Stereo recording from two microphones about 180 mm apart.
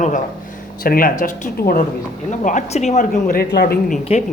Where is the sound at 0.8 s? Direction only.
55° left (ahead or behind).